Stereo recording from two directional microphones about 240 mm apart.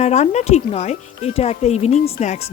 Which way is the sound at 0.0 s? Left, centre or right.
Left.